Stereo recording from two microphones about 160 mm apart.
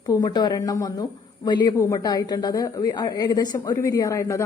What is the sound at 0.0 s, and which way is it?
A woman's voice, 25° left (ahead or behind).